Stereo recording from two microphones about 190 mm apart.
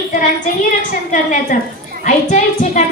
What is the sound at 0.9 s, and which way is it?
A woman's voice, 45° left (ahead or behind).